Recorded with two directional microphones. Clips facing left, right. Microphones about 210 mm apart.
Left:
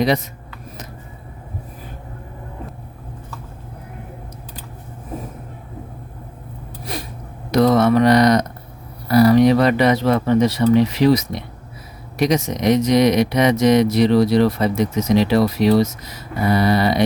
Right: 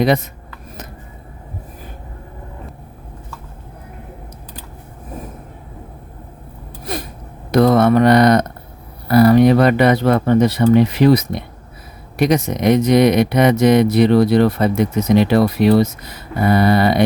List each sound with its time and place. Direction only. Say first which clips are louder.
7.5 s speech: right 2 dB; 55° right (ahead or behind)